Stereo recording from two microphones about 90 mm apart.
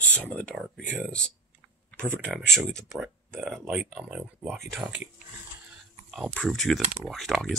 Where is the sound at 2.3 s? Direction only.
5° left (ahead or behind).